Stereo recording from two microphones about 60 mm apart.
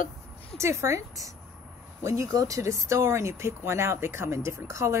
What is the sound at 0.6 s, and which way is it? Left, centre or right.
Speech, right.